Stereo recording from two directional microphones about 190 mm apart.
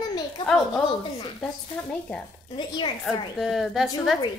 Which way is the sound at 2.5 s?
25° left (ahead or behind).